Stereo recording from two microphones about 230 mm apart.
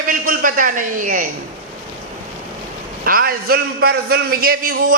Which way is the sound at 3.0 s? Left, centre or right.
Right.